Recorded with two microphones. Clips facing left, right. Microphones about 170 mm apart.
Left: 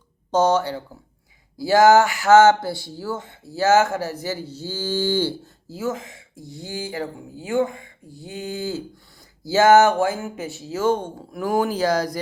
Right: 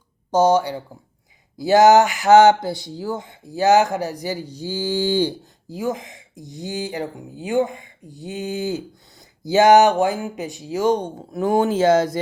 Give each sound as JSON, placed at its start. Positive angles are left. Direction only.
{"t": 0.3, "sound": "speech", "side_deg": -10}